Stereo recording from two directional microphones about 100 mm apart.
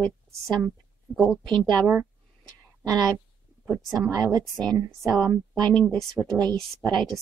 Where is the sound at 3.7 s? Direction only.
Centre (ahead or behind).